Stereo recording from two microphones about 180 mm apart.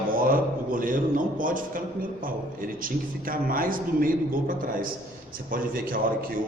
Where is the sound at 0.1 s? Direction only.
50° right (ahead or behind).